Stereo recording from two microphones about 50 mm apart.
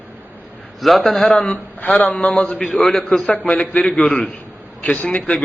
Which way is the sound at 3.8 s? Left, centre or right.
Centre.